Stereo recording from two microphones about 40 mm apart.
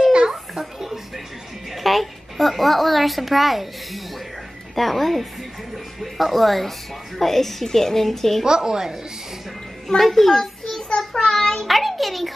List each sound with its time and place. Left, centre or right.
0.1 s a sound: centre
1.7 s a child's voice: centre
8.5 s a woman's voice: centre
9.8 s a woman's voice: centre
11.0 s child singing: centre
11.6 s a sound: centre